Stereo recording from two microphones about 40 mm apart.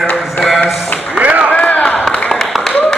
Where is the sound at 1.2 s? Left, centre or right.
Right.